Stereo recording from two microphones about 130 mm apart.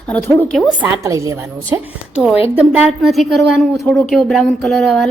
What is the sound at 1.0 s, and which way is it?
Speech, 25° right (ahead or behind).